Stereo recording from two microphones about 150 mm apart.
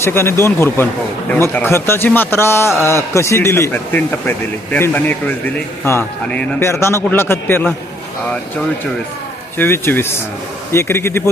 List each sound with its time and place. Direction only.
0.0 s a man's voice: 15° left (ahead or behind)
9.6 s a man's voice: 15° left (ahead or behind)